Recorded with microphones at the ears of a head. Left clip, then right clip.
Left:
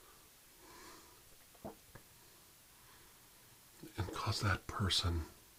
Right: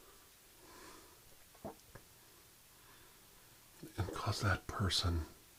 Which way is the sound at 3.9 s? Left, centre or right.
Centre.